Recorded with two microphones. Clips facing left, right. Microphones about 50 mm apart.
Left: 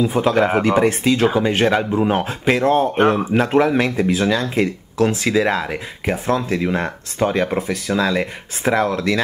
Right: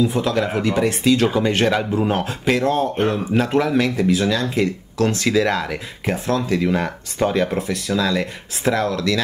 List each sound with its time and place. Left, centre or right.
0.0 s speech: left
2.5 s speech: left
2.9 s speech: left
3.3 s speech: left